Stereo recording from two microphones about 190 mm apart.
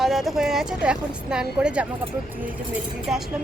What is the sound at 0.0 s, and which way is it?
A woman's voice, centre (ahead or behind).